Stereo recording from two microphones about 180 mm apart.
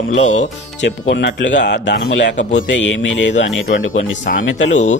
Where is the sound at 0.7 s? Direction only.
85° left.